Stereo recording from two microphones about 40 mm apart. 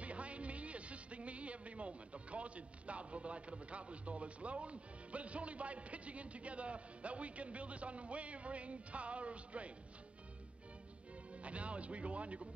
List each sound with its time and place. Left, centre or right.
0.0 s speech: right
11.4 s speech: right